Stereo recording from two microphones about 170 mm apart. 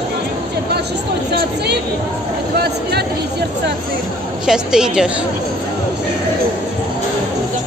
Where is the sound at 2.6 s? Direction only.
70° right (ahead or behind).